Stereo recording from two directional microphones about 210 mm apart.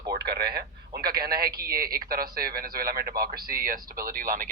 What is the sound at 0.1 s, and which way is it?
Speech, 50° right (ahead or behind).